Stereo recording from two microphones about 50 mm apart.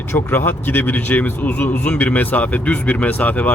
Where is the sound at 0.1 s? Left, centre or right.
Left.